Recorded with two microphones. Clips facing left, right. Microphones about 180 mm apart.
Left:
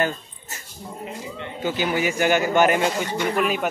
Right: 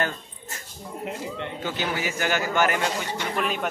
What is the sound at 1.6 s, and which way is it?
A man's voice, 10° left (ahead or behind).